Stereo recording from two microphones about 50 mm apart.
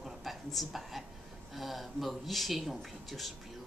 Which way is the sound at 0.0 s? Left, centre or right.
Centre.